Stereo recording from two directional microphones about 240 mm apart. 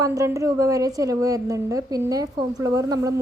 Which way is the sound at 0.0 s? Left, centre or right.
Centre.